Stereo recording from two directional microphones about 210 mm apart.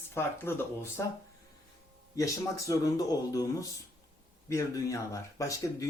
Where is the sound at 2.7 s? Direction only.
15° left (ahead or behind).